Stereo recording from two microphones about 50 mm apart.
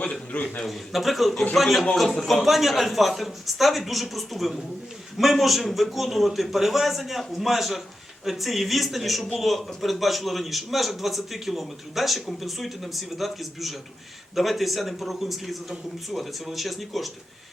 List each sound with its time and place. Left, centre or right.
0.0 s a man's voice: left
0.6 s a man's voice: centre